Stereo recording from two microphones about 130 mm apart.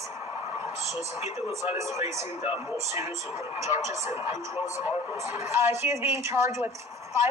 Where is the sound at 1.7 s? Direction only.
20° right (ahead or behind).